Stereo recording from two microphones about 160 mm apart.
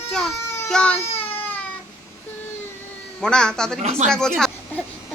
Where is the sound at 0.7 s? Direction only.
5° left (ahead or behind).